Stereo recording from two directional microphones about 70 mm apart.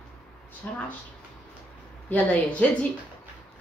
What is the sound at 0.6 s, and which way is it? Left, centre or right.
Speech, left.